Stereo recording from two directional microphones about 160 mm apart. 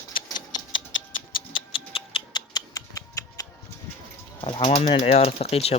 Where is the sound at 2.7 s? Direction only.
20° left (ahead or behind).